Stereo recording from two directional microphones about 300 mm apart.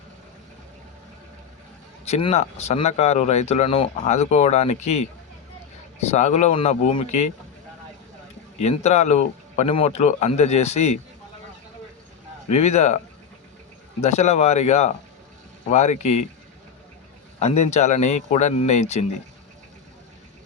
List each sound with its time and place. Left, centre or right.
2.0 s speech: left
6.1 s speech: left
8.6 s speech: left
12.5 s speech: left
14.0 s speech: left
17.4 s speech: left